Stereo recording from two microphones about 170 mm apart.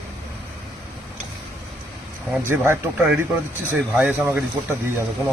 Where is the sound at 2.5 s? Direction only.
10° right (ahead or behind).